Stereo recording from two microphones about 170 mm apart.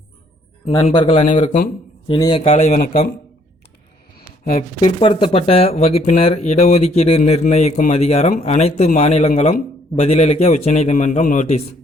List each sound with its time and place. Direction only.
0.9 s speech: 35° left (ahead or behind)
2.0 s speech: 30° left (ahead or behind); by 3.0 s 55° left (ahead or behind)
4.8 s speech: 35° left (ahead or behind)